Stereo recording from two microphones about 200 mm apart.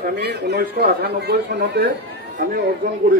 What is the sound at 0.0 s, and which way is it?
A man's voice, 55° right (ahead or behind).